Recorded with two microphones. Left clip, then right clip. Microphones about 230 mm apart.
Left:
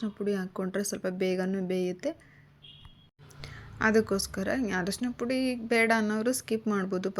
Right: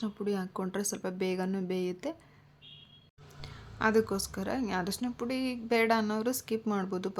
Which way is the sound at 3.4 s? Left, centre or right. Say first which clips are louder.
Left 2 dB; centre.